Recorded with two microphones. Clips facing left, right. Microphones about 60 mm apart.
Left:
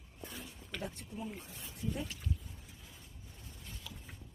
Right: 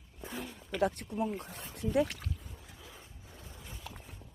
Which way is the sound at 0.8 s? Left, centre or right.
Right.